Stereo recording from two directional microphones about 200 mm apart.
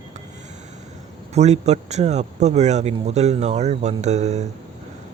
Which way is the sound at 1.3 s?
35° right (ahead or behind).